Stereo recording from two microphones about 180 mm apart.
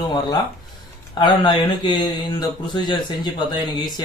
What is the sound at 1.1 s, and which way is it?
Speech, 25° left (ahead or behind).